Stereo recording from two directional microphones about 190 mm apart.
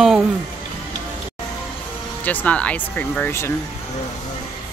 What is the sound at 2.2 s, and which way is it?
Speech, 10° left (ahead or behind).